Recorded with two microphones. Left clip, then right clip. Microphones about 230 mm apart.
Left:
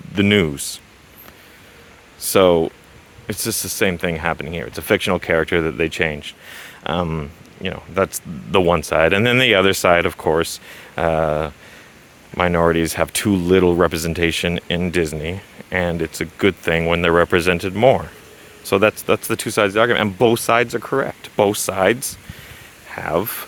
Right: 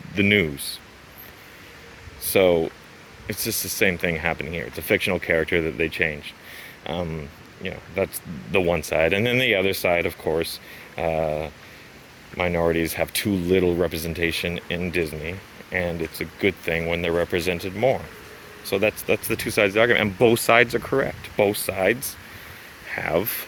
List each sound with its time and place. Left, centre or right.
0.1 s speech: left
2.2 s speech: left; by 21.2 s centre
21.2 s speech: left
22.9 s speech: centre